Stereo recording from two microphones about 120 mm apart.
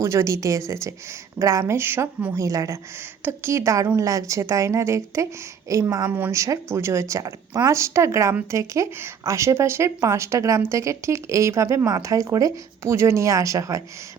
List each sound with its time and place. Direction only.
0.0 s speech: 25° right (ahead or behind)
6.1 s speech: 15° right (ahead or behind)